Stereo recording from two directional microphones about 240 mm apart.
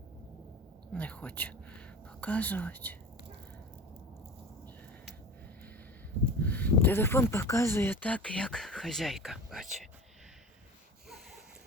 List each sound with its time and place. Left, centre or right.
0.9 s whispering: centre
2.2 s speech: centre
6.4 s speech: centre